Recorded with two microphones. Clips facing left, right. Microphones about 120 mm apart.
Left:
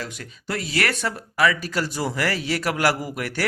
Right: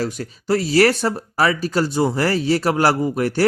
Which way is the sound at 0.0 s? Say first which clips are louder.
Right 9 dB; 40° right (ahead or behind).